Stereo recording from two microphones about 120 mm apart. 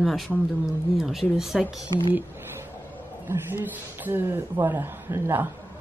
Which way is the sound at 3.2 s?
15° right (ahead or behind).